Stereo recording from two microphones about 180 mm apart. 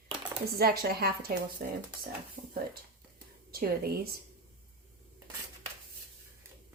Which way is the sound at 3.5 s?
55° right (ahead or behind).